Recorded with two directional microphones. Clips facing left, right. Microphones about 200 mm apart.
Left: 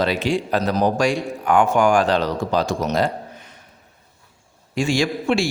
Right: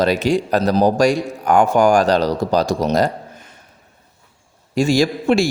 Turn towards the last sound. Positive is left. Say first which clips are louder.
# right 4 dB
turn(degrees=-40)  # may be behind; listen again after turning